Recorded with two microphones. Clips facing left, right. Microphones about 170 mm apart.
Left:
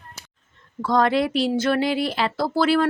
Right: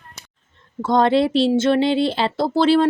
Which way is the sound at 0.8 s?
25° right (ahead or behind).